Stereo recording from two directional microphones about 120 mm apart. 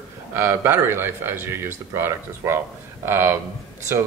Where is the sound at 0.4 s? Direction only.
20° right (ahead or behind).